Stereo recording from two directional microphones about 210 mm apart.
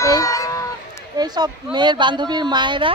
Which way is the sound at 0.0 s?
15° left (ahead or behind).